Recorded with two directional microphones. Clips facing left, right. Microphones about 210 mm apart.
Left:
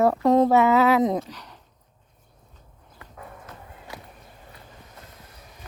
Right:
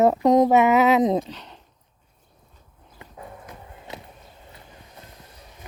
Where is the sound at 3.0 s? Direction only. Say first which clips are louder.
Right 2 dB; 20° right (ahead or behind).